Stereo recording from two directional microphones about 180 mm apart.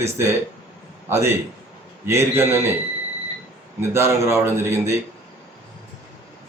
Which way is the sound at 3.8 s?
15° right (ahead or behind).